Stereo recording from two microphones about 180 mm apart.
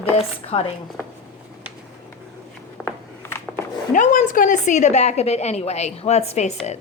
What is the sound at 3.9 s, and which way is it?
A woman's voice, 45° left (ahead or behind).